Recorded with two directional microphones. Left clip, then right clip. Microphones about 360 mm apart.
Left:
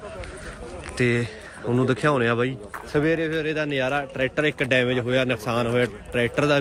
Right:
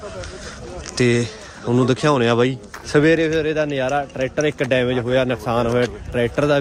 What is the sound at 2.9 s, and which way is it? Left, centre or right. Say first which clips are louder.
Speech: right 7 dB; right.